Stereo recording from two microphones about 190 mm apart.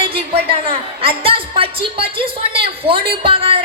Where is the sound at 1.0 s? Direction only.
30° right (ahead or behind).